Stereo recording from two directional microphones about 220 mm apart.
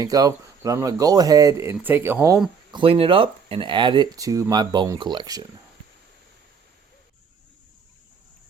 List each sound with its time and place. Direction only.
0.0 s speech: 15° right (ahead or behind)
2.7 s speech: 25° right (ahead or behind)